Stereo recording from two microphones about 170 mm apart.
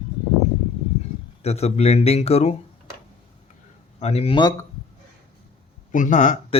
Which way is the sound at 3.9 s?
40° left (ahead or behind).